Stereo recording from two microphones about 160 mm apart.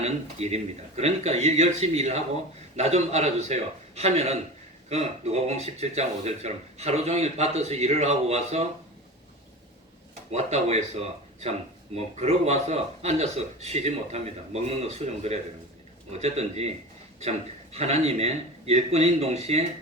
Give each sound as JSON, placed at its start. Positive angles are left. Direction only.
{"t": 0.0, "sound": "speech", "side_deg": -40}
{"t": 10.3, "sound": "speech", "side_deg": -40}
{"t": 11.9, "sound": "speech", "side_deg": -40}